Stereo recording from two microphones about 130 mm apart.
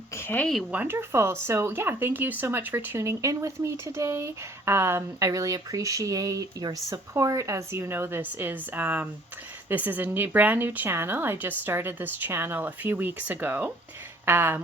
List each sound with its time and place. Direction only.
0.2 s speech: 15° left (ahead or behind)
0.7 s speech: 15° right (ahead or behind)